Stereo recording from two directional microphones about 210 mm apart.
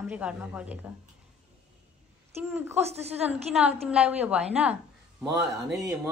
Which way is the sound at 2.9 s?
30° right (ahead or behind).